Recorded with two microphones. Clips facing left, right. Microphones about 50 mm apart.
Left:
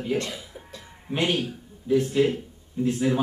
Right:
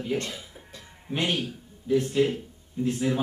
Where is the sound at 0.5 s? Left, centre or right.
Centre.